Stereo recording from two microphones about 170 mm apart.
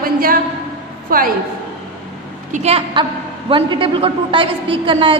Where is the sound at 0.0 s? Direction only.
60° right (ahead or behind).